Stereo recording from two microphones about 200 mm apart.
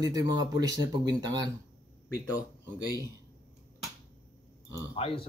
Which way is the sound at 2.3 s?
20° left (ahead or behind).